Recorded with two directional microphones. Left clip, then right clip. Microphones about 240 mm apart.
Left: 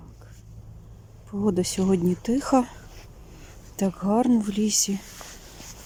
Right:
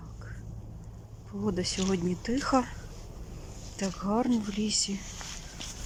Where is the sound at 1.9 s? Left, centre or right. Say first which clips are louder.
Left 7 dB; centre.